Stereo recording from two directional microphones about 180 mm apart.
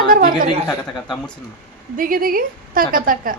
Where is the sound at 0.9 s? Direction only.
Centre (ahead or behind).